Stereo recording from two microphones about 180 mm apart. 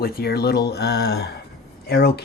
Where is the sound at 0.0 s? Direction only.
55° left (ahead or behind).